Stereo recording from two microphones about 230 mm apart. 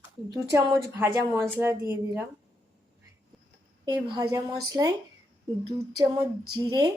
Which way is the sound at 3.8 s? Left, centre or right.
Centre.